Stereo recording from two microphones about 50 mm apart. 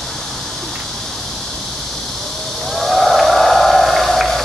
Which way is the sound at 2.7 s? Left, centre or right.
Centre.